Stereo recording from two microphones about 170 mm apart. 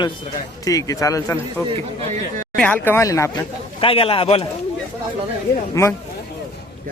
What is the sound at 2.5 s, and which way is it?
Speech, 5° left (ahead or behind).